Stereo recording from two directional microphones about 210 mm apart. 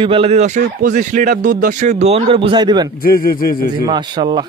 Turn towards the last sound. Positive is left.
turn(degrees=-20)  # may be behind; listen again after turning